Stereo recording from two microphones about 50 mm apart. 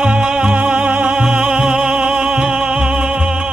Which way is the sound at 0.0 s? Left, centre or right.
Centre.